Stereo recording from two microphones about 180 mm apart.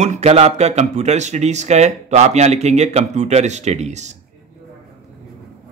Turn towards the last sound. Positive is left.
turn(degrees=-40)  # may be behind; listen again after turning